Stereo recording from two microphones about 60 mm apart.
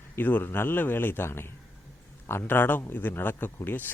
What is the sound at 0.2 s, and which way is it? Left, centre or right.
A man's voice, left.